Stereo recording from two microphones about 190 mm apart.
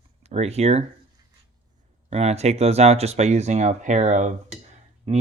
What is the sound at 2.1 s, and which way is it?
Speech, 35° right (ahead or behind).